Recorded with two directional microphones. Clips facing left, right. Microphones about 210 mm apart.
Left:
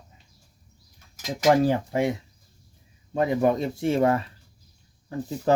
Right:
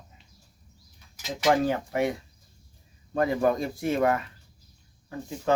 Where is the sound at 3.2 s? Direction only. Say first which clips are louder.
Left 2 dB; 20° left (ahead or behind).